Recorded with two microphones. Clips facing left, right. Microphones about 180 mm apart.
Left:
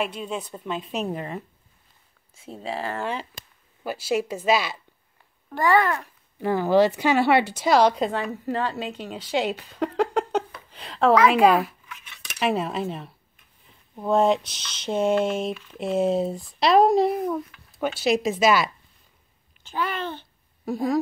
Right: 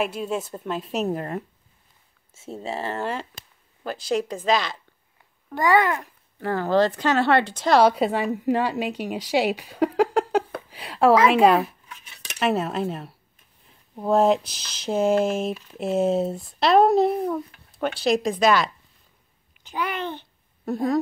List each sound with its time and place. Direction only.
0.0 s speech: 5° right (ahead or behind)
2.6 s speech: 25° right (ahead or behind)
3.0 s speech: centre (ahead or behind)
5.5 s a woman's voice: 15° right (ahead or behind)
6.4 s speech: 15° left (ahead or behind)
7.8 s a woman's voice: 5° right (ahead or behind)
10.7 s a sound: 10° right (ahead or behind)
11.2 s speech: centre (ahead or behind)
11.9 s cutlery: 35° right (ahead or behind)
12.4 s speech: centre (ahead or behind)
19.6 s a sound: 15° right (ahead or behind)
20.6 s speech: centre (ahead or behind)